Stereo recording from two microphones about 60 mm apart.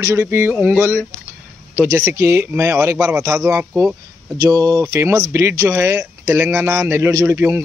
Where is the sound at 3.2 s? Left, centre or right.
Right.